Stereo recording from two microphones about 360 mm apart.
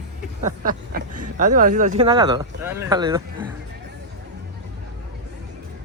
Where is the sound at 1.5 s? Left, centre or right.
Right.